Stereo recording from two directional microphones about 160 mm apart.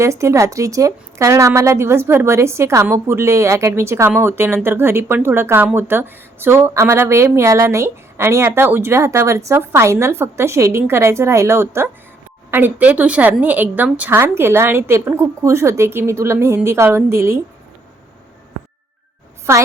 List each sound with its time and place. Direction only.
0.0 s speech: 20° right (ahead or behind)
19.5 s speech: 15° right (ahead or behind)